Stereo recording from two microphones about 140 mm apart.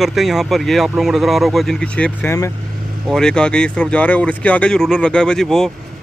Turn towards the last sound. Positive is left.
turn(degrees=0)  # may be behind; listen again after turning